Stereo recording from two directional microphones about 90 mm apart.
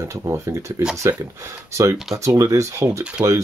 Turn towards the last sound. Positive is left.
turn(degrees=-35)  # may be behind; listen again after turning